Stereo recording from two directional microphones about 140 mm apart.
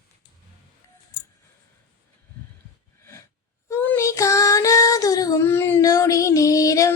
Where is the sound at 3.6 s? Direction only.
15° left (ahead or behind).